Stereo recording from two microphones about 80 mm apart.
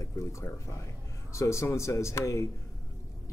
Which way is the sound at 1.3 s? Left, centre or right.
Left.